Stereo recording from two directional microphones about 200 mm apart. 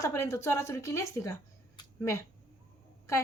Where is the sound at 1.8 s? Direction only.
15° left (ahead or behind).